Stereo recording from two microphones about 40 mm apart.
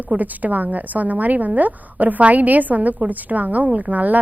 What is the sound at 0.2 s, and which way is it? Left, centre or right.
A woman's voice, right.